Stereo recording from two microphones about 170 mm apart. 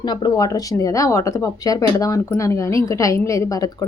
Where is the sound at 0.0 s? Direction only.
25° left (ahead or behind).